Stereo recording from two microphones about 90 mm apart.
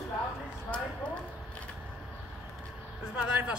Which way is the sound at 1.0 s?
10° left (ahead or behind).